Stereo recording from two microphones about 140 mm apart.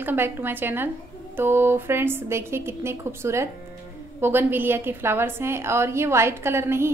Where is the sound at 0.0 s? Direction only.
15° right (ahead or behind).